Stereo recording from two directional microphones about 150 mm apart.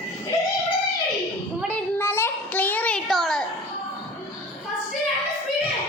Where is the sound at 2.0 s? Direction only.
15° left (ahead or behind).